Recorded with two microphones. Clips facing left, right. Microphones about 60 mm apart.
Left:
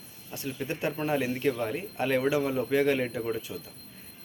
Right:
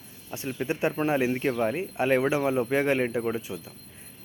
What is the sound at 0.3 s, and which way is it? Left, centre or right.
A man's voice, right.